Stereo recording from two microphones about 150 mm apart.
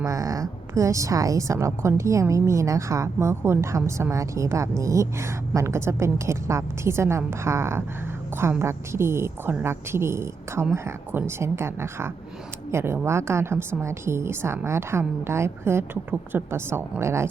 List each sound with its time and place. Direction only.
0.0 s a woman's voice: 20° right (ahead or behind)